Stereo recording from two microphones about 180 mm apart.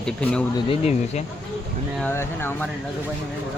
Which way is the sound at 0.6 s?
35° left (ahead or behind).